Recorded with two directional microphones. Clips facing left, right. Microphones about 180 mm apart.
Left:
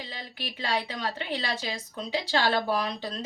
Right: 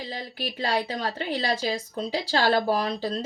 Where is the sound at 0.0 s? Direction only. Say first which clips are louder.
Right 6 dB; 40° right (ahead or behind).